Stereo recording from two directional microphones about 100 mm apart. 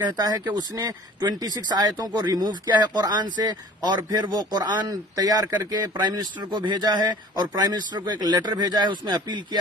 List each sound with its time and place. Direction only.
0.0 s speech: 45° right (ahead or behind)